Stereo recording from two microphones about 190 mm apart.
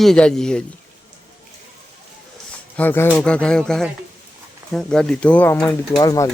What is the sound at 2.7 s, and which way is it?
Speech, 10° left (ahead or behind).